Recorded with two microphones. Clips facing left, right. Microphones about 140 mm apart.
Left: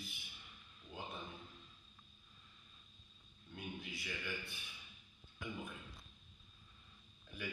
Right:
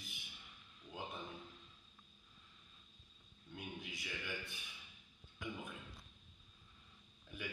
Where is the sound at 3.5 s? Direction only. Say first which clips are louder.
Left 1 dB; 15° right (ahead or behind).